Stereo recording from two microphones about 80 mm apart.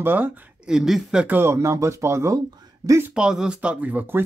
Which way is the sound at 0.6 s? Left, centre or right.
Centre.